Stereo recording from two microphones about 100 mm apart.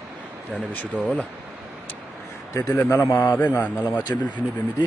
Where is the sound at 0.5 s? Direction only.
15° right (ahead or behind).